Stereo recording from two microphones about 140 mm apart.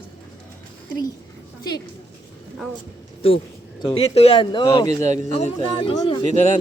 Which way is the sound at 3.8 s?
45° left (ahead or behind).